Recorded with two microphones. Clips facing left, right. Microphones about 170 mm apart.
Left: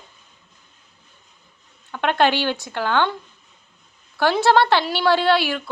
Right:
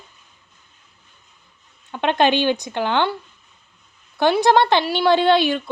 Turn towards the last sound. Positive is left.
turn(degrees=-20)  # may be behind; listen again after turning